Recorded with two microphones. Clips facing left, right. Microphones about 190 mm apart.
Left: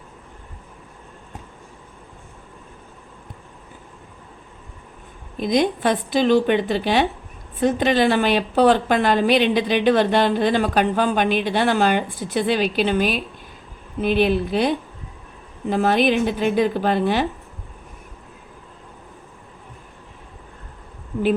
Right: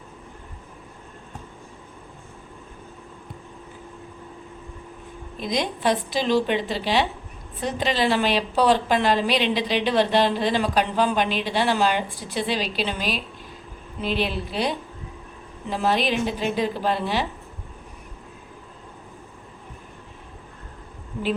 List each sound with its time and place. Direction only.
5.4 s a woman's voice: 50° left (ahead or behind)